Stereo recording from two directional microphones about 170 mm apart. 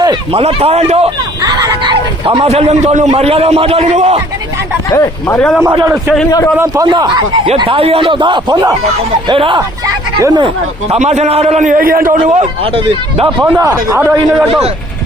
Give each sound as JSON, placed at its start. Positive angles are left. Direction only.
{"t": 0.0, "sound": "a man's voice", "side_deg": -30}
{"t": 1.4, "sound": "a man's voice", "side_deg": -25}
{"t": 5.3, "sound": "a man's voice", "side_deg": 5}
{"t": 5.8, "sound": "a man's voice", "side_deg": -15}
{"t": 10.2, "sound": "speech", "side_deg": -20}
{"t": 10.4, "sound": "a man's voice", "side_deg": -40}
{"t": 12.2, "sound": "a man's voice", "side_deg": -35}
{"t": 13.2, "sound": "a man's voice", "side_deg": -15}